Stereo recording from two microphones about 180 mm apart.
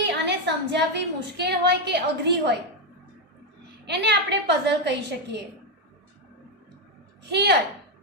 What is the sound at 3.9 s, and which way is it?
A woman's voice, 70° right (ahead or behind).